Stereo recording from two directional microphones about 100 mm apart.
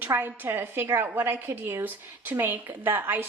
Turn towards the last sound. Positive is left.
turn(degrees=-20)  # may be behind; listen again after turning